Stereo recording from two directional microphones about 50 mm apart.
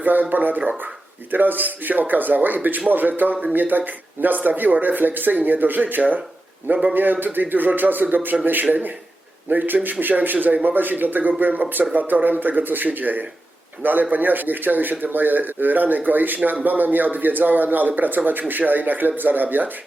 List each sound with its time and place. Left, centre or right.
0.0 s speech: right
9.5 s speech: right